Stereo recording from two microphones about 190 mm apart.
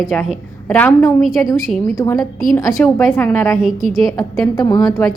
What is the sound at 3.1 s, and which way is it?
Speech, 5° left (ahead or behind).